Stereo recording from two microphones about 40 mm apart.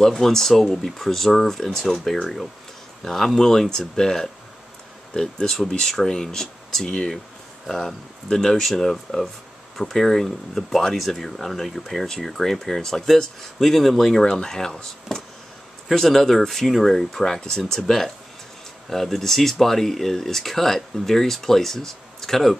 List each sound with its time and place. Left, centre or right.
0.1 s speech: centre
8.3 s speech: centre
14.2 s speech: centre